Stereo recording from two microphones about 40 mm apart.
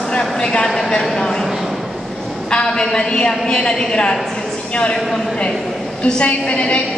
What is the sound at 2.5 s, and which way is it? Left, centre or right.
A woman's voice, left.